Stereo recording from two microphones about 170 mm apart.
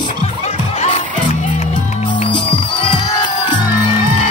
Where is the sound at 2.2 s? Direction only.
30° left (ahead or behind).